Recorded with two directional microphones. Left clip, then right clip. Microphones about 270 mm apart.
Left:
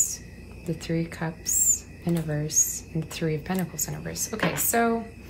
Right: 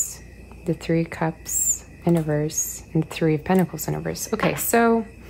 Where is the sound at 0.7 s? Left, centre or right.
Right.